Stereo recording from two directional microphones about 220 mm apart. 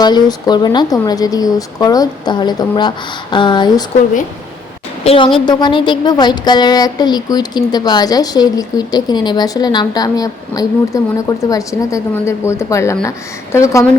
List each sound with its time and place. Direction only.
0.0 s a woman's voice: 20° left (ahead or behind)
5.0 s a woman's voice: 25° left (ahead or behind)